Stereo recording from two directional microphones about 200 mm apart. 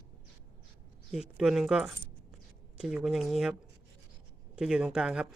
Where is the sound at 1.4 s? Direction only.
5° right (ahead or behind).